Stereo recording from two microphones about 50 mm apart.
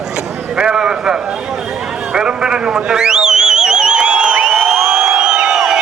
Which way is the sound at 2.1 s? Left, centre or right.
Centre.